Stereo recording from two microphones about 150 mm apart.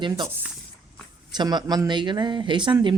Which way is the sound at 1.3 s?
30° right (ahead or behind).